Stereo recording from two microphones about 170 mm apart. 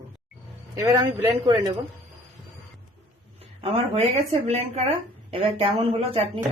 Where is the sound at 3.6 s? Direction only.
35° right (ahead or behind).